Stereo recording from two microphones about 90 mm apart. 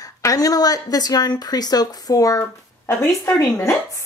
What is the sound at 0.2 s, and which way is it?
A woman's voice, 40° left (ahead or behind).